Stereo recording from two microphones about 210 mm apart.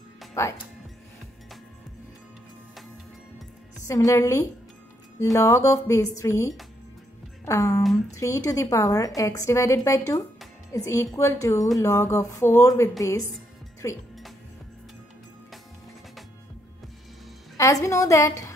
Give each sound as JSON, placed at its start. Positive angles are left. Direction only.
{"t": 0.3, "sound": "speech", "side_deg": 15}
{"t": 3.8, "sound": "a woman's voice", "side_deg": 15}
{"t": 17.6, "sound": "a woman's voice", "side_deg": 15}